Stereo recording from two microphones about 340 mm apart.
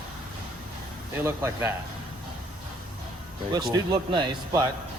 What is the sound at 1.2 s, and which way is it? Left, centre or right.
Speech, centre.